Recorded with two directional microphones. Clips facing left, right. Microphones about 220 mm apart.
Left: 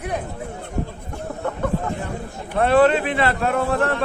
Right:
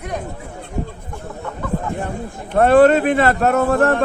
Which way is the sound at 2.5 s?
45° right (ahead or behind).